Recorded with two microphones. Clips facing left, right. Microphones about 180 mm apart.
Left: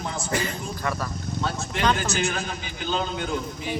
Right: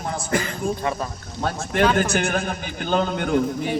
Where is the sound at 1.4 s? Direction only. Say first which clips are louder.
Right 7 dB; 50° right (ahead or behind).